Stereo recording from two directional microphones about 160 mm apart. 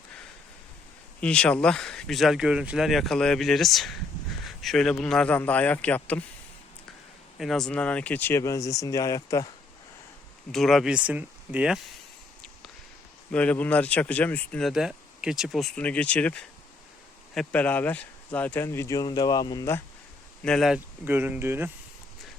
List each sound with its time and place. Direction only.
1.2 s speech: 5° left (ahead or behind)
7.3 s speech: centre (ahead or behind); by 9.5 s 20° left (ahead or behind)
10.5 s speech: centre (ahead or behind)
13.3 s speech: 10° left (ahead or behind)
20.4 s speech: 5° left (ahead or behind)
21.0 s speech: 10° right (ahead or behind)